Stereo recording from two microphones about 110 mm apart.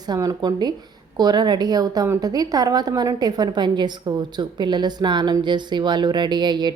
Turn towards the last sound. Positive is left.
turn(degrees=-40)  # may be behind; listen again after turning